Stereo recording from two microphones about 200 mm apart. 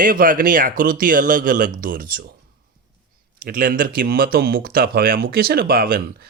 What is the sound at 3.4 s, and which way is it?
Speech, 45° right (ahead or behind).